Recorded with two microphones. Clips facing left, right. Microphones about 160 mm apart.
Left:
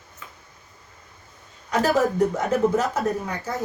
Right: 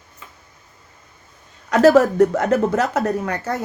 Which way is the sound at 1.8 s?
80° right.